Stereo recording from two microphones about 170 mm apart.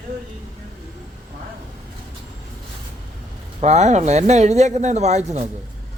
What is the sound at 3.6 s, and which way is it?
Speech, 45° right (ahead or behind).